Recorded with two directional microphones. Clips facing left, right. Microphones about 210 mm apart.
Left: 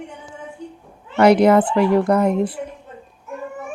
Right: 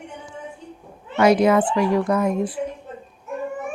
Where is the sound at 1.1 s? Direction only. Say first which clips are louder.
Left 3 dB; 60° left (ahead or behind).